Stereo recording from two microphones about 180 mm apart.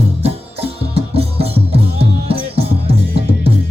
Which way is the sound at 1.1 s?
35° right (ahead or behind).